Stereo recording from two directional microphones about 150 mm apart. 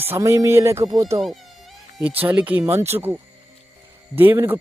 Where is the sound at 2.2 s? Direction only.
10° right (ahead or behind).